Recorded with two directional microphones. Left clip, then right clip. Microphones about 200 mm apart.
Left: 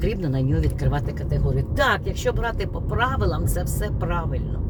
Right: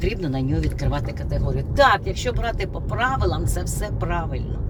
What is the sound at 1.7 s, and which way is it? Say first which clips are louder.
Speech: right 5 dB; 15° left (ahead or behind).